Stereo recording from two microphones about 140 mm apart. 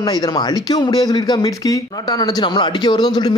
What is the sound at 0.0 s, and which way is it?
Speech, 30° left (ahead or behind).